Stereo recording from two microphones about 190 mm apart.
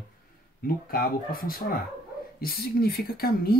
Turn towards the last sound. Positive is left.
turn(degrees=55)  # may be behind; listen again after turning